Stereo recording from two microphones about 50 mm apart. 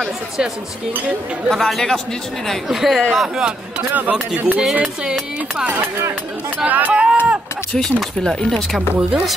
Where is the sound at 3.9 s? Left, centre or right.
Right.